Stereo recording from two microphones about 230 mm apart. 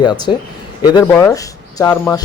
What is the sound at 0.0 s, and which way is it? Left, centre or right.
A man's voice, centre.